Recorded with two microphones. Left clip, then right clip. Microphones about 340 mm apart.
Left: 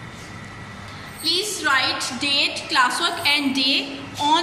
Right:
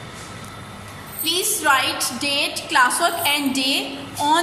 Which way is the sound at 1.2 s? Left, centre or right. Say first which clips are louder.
Right 1 dB; centre.